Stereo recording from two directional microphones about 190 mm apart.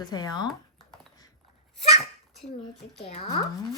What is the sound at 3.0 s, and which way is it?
Speech, 35° left (ahead or behind).